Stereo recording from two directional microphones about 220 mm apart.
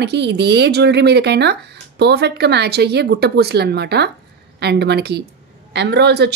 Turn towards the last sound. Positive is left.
turn(degrees=-50)  # may be behind; listen again after turning